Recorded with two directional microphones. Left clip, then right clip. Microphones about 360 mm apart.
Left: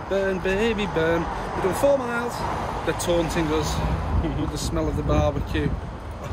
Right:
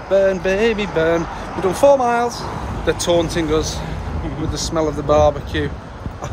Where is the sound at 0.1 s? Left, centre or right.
Centre.